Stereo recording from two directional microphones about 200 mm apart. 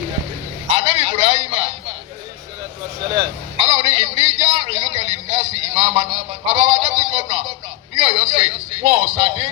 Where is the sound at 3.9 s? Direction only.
35° right (ahead or behind).